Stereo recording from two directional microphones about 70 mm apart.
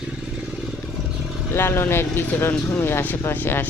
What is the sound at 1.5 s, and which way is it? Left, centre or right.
Mantra, left.